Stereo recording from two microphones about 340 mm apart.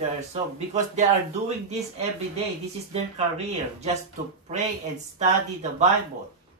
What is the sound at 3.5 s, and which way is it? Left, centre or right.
Speech, centre.